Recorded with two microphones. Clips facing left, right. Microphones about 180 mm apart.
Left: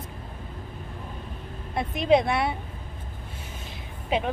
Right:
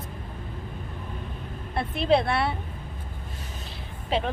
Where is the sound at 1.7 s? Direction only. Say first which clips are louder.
Left 2 dB; 15° left (ahead or behind).